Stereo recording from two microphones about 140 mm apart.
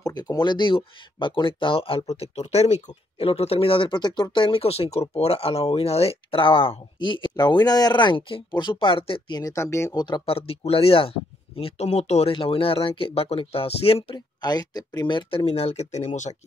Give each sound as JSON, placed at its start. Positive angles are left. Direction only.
{"t": 0.0, "sound": "speech", "side_deg": 25}
{"t": 2.3, "sound": "speech", "side_deg": 50}
{"t": 9.4, "sound": "speech", "side_deg": 20}
{"t": 10.0, "sound": "speech", "side_deg": 35}